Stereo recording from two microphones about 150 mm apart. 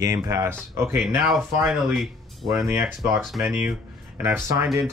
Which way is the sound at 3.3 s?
Centre (ahead or behind).